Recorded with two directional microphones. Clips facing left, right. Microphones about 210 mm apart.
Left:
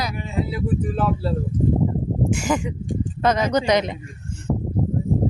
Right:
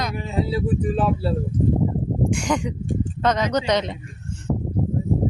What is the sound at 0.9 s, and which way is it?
Speech, 15° right (ahead or behind).